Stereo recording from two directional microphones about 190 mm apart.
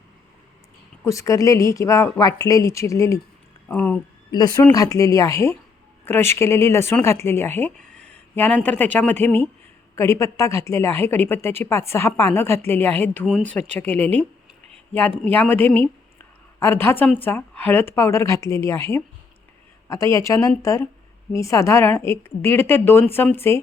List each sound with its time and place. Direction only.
1.0 s a woman's voice: 15° left (ahead or behind)
4.3 s a woman's voice: 20° left (ahead or behind)
15.2 s a woman's voice: 10° left (ahead or behind)